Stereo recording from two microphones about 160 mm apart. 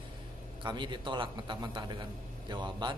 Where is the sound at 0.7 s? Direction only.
30° right (ahead or behind).